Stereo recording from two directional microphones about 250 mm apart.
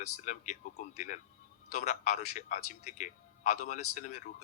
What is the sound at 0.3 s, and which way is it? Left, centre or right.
A man's voice, left.